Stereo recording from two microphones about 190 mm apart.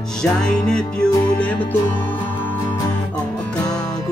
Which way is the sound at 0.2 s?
5° left (ahead or behind).